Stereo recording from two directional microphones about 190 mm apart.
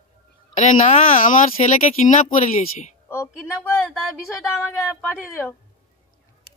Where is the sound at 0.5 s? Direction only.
40° left (ahead or behind).